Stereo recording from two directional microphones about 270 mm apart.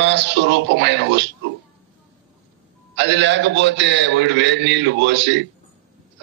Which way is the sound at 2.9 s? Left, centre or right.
Right.